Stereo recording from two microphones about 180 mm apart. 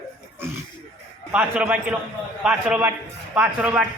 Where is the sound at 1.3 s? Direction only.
10° right (ahead or behind).